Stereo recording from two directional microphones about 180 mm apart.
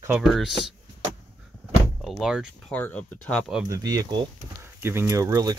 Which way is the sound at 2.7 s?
10° left (ahead or behind).